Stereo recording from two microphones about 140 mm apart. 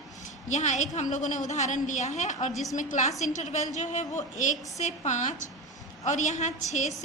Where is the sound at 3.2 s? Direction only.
55° left (ahead or behind).